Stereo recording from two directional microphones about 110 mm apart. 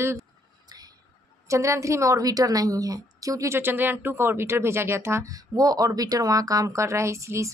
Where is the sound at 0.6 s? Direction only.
35° right (ahead or behind).